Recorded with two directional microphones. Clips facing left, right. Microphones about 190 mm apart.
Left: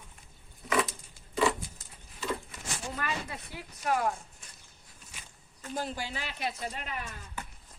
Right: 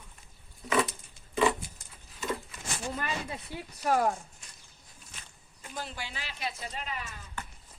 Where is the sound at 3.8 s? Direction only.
40° right (ahead or behind).